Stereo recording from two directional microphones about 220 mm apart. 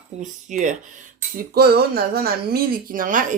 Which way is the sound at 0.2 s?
35° right (ahead or behind).